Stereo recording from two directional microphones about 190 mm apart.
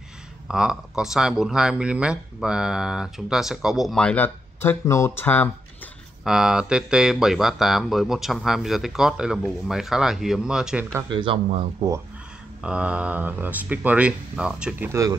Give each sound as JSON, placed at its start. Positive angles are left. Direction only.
{"t": 0.5, "sound": "speech", "side_deg": -5}
{"t": 6.2, "sound": "speech", "side_deg": -5}
{"t": 11.1, "sound": "speech", "side_deg": -25}
{"t": 12.6, "sound": "speech", "side_deg": -5}